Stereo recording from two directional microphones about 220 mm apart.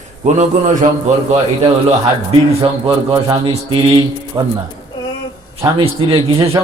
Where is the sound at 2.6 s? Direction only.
20° right (ahead or behind).